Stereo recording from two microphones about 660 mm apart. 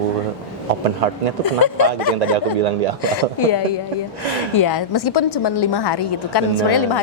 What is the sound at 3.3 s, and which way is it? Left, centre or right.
A woman's voice, left.